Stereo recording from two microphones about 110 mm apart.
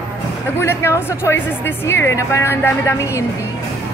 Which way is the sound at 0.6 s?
25° left (ahead or behind).